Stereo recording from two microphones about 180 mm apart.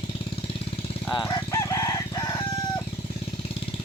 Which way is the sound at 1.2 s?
20° left (ahead or behind).